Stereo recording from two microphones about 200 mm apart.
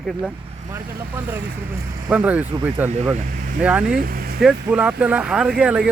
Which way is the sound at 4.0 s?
50° right (ahead or behind).